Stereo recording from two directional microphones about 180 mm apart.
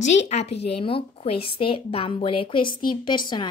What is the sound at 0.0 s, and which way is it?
A woman's voice, 35° left (ahead or behind).